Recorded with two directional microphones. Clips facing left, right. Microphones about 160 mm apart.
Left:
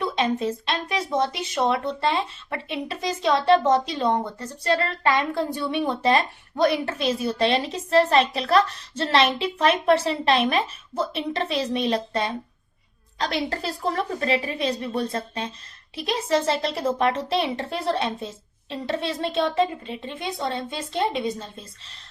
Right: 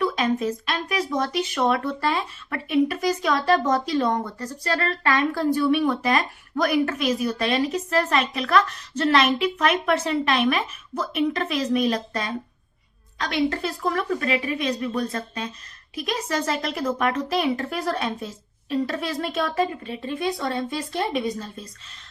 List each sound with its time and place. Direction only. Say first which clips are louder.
0.0 s a woman's voice: right 1 dB; 25° left (ahead or behind)